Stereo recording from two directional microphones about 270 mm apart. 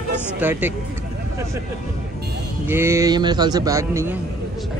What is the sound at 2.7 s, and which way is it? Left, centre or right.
Speech, centre.